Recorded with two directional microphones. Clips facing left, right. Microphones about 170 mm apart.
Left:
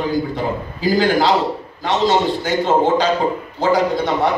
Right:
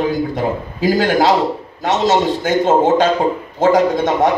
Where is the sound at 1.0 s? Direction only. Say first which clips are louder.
Right 1 dB; 45° right (ahead or behind).